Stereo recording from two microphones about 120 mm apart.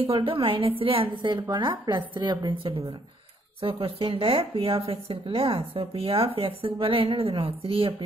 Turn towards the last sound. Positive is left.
turn(degrees=-50)  # may be behind; listen again after turning